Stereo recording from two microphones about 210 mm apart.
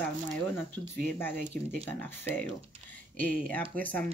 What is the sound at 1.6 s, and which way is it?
Speech, 40° right (ahead or behind).